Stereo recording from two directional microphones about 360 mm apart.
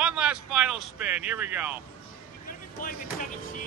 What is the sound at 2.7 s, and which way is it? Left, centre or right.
Speech, left.